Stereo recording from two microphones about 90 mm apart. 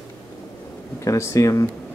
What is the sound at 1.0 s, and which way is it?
Speech, 35° left (ahead or behind).